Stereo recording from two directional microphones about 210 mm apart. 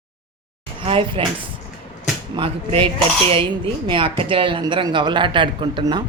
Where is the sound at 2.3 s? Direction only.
25° right (ahead or behind).